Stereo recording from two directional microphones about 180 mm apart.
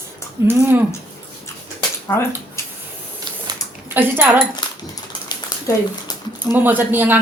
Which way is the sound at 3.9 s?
10° right (ahead or behind).